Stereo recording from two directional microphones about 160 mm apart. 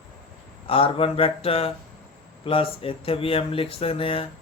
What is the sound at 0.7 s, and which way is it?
Speech, 35° left (ahead or behind).